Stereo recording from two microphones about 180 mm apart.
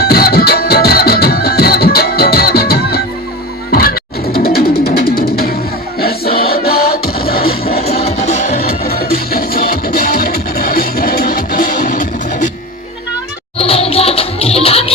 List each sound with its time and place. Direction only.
0.0 s music: 60° left (ahead or behind)
7.8 s music: 35° left (ahead or behind)
8.5 s music: 55° left (ahead or behind)
13.6 s music: 35° left (ahead or behind)